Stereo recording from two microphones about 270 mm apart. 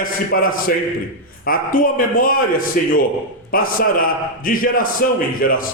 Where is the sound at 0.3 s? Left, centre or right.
Left.